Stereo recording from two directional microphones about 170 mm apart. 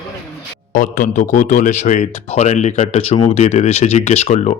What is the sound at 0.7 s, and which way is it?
Speech, 50° left (ahead or behind).